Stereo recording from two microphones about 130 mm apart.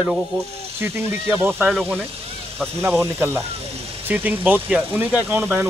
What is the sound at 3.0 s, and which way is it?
Speech, 15° right (ahead or behind).